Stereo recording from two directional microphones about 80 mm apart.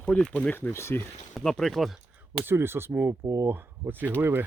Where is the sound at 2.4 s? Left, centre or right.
Right.